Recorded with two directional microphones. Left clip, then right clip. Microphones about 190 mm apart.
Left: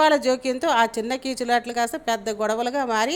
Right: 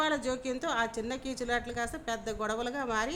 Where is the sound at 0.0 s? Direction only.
30° left (ahead or behind).